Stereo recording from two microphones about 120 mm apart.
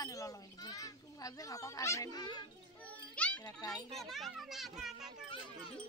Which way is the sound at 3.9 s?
Centre (ahead or behind).